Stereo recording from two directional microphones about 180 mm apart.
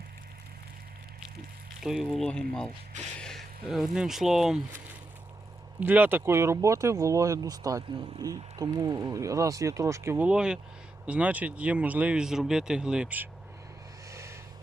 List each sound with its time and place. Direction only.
1.8 s speech: centre (ahead or behind)
5.8 s speech: 10° right (ahead or behind)
14.1 s a sound: 15° right (ahead or behind)